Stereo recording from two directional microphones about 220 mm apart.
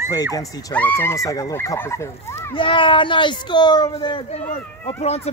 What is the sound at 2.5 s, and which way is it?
Speech, 25° left (ahead or behind).